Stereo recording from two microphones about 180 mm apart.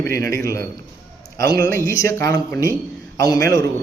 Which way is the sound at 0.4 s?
15° left (ahead or behind).